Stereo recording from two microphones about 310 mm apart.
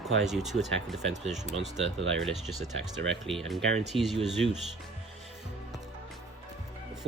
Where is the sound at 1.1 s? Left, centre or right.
Right.